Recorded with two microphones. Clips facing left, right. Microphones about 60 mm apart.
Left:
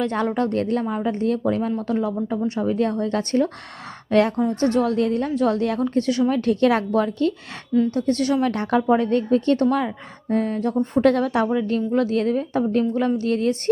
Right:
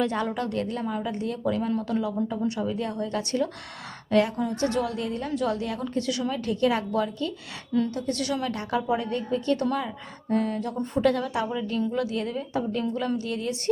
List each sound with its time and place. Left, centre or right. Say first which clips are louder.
0.3 s a woman's voice: left 7 dB; left
4.4 s a woman's voice: left 6 dB; left
6.3 s a woman's voice: left 4 dB; left
7.9 s a woman's voice: left 7 dB; left
12.8 s speech: left 7 dB; left
13.1 s a woman's voice: left 8 dB; left